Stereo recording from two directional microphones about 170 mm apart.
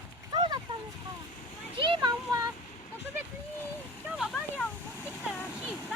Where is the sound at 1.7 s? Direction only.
30° right (ahead or behind).